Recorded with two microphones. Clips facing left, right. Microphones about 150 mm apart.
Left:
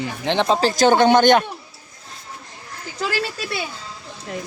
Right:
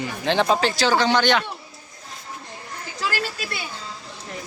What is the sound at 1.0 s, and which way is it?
Speech, 50° left (ahead or behind).